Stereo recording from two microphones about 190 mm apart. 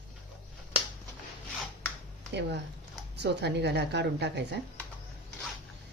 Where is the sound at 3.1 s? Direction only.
65° right (ahead or behind).